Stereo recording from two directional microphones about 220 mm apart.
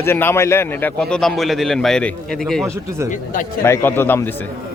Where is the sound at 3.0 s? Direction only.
35° left (ahead or behind).